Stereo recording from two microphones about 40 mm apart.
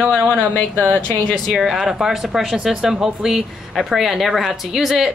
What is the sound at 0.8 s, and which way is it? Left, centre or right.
Speech, right.